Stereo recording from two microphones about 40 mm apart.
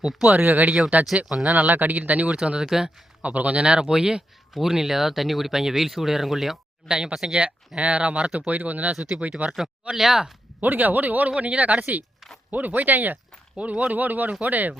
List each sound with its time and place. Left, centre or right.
0.0 s speech: centre
0.3 s speech: right
1.3 s speech: centre
1.7 s speech: right
2.6 s speech: centre
3.2 s speech: right; by 6.6 s centre
6.8 s speech: centre
7.8 s speech: right
8.4 s speech: right
9.9 s speech: centre
10.6 s speech: right
12.5 s speech: right
13.6 s speech: right
13.9 s speech: right